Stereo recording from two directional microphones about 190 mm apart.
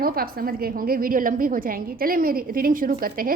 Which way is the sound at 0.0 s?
50° right (ahead or behind).